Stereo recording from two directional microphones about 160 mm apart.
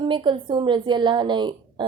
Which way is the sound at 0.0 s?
30° right (ahead or behind).